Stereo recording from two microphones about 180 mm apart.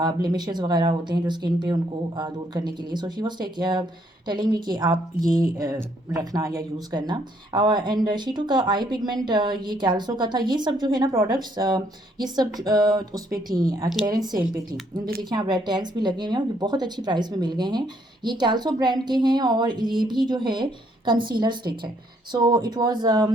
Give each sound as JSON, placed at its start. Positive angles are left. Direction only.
{"t": 0.0, "sound": "a woman's voice", "side_deg": -25}
{"t": 14.7, "sound": "speech", "side_deg": -55}
{"t": 15.3, "sound": "a woman's voice", "side_deg": -25}